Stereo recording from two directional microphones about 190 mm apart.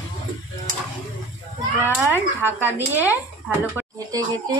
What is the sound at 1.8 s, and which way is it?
A woman's voice, 10° right (ahead or behind).